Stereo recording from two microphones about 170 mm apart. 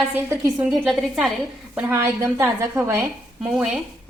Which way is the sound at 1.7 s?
15° right (ahead or behind).